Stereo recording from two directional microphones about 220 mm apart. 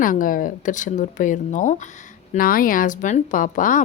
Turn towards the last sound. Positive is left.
turn(degrees=35)  # may be behind; listen again after turning